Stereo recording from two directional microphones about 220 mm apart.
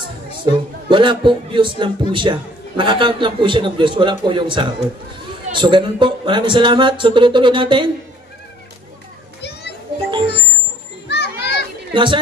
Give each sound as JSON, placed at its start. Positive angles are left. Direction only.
{"t": 0.4, "sound": "speech", "side_deg": -20}
{"t": 9.4, "sound": "children playing", "side_deg": 50}
{"t": 10.2, "sound": "music", "side_deg": 50}
{"t": 11.1, "sound": "children playing", "side_deg": 50}
{"t": 11.9, "sound": "speech", "side_deg": -20}